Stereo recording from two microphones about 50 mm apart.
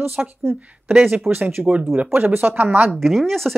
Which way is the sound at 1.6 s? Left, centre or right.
Centre.